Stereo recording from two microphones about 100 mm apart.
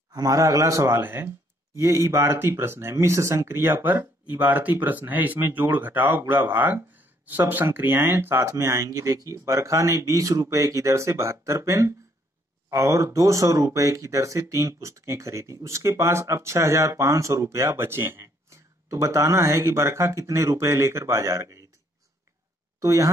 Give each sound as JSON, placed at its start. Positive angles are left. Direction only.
{"t": 0.1, "sound": "a man's voice", "side_deg": -35}
{"t": 22.8, "sound": "speech", "side_deg": -35}